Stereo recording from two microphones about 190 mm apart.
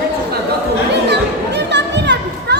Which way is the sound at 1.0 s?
65° right (ahead or behind).